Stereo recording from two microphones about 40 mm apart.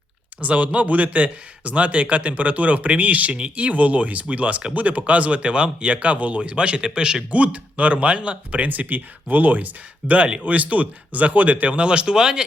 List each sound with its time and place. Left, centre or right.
0.4 s a man's voice: right
7.3 s a man's voice: right
11.7 s speech: right